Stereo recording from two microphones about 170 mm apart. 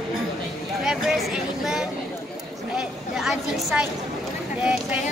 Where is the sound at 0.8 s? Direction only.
Centre (ahead or behind).